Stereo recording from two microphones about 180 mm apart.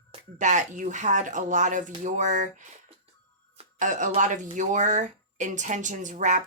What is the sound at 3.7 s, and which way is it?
Speech, 45° right (ahead or behind).